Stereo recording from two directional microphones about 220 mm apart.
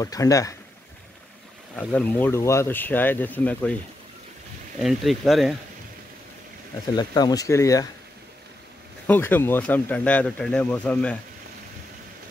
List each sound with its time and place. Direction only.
0.0 s speech: 15° left (ahead or behind)
1.8 s speech: 5° left (ahead or behind)
4.7 s speech: centre (ahead or behind)
7.0 s speech: 20° left (ahead or behind)
9.0 s speech: 10° left (ahead or behind)